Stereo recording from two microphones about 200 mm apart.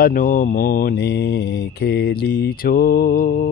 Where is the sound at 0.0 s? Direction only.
40° left (ahead or behind).